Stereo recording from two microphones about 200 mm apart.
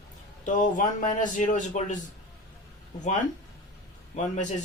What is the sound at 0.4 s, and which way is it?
Speech, 40° left (ahead or behind).